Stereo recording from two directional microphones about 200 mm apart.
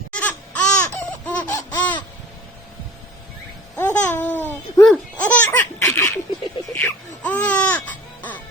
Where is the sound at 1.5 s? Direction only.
10° left (ahead or behind).